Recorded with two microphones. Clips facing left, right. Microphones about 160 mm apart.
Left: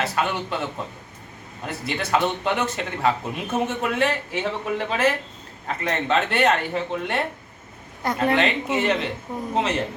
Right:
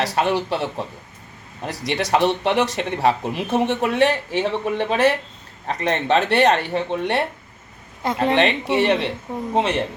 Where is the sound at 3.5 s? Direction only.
70° right (ahead or behind).